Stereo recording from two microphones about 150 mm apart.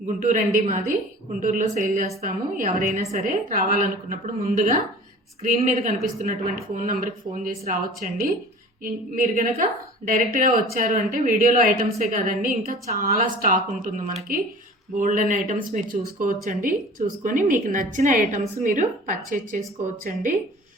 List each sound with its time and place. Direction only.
0.0 s speech: 60° right (ahead or behind)
5.8 s a woman's voice: 65° right (ahead or behind)